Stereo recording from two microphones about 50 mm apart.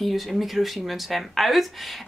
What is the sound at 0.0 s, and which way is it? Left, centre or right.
Speech, centre.